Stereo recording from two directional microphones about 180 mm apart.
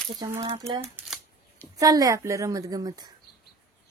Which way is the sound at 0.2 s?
20° right (ahead or behind).